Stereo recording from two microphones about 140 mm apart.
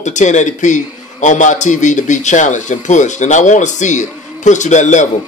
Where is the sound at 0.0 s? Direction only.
60° left (ahead or behind).